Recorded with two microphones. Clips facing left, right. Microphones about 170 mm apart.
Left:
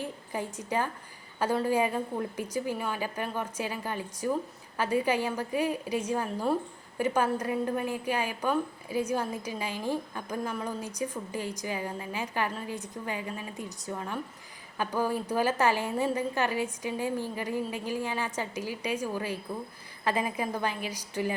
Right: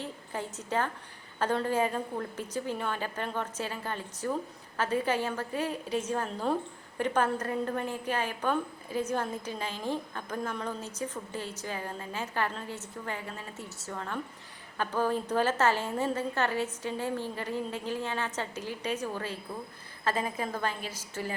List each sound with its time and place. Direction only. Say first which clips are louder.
0.0 s a woman's voice: left 2 dB; 10° left (ahead or behind)